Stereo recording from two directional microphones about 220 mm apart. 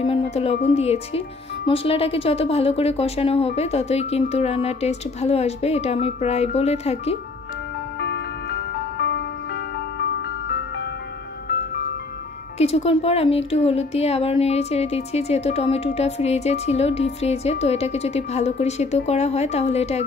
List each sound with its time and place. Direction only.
0.0 s music: 25° left (ahead or behind)
0.7 s speech: 30° left (ahead or behind)
8.0 s music: 50° left (ahead or behind)
11.4 s music: 45° left (ahead or behind)
12.5 s speech: 30° left (ahead or behind)